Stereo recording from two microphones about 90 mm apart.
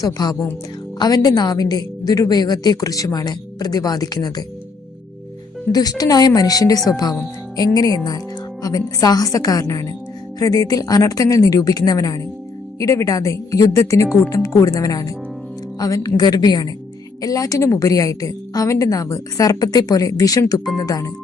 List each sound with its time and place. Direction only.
0.0 s a woman's voice: 50° left (ahead or behind)
5.7 s a woman's voice: 45° left (ahead or behind)